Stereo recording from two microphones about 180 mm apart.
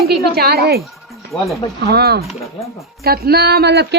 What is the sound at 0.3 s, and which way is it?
Speech, 60° right (ahead or behind).